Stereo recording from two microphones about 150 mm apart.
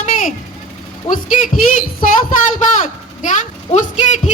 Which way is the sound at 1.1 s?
65° left (ahead or behind).